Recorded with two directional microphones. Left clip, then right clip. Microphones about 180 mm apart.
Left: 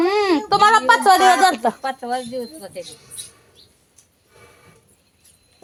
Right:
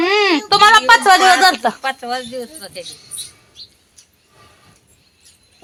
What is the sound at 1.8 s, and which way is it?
Speech, 20° left (ahead or behind).